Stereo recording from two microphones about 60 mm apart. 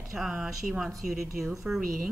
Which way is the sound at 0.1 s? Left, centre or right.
Centre.